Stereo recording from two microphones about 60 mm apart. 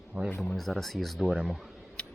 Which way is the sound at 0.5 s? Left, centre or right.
Centre.